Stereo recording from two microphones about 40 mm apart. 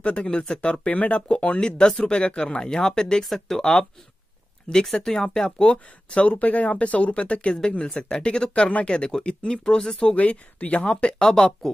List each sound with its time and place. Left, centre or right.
0.0 s speech: left
4.8 s speech: centre
9.9 s speech: left